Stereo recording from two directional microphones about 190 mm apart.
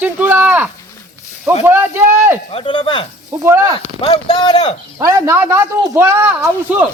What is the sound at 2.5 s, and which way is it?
Speech, 25° left (ahead or behind).